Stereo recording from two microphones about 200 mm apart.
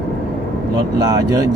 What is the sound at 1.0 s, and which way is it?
Speech, 20° right (ahead or behind).